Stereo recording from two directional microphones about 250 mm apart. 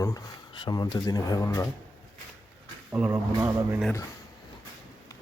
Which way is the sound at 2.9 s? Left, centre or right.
Centre.